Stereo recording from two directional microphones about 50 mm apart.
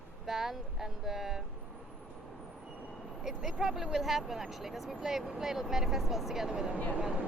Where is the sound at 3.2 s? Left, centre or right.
Centre.